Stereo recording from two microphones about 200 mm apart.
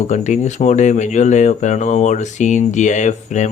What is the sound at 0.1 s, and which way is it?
Speech, 35° left (ahead or behind).